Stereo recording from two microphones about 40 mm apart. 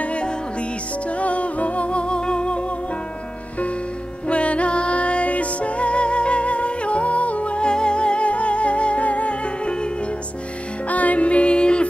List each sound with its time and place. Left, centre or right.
0.0 s music: left
4.3 s music: left
10.9 s music: left